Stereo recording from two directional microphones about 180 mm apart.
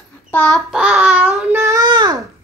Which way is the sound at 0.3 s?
5° left (ahead or behind).